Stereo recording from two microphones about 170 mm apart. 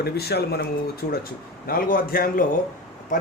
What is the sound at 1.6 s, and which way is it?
Speech, 60° left (ahead or behind).